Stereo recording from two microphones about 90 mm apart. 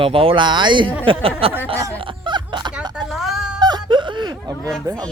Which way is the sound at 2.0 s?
70° right (ahead or behind).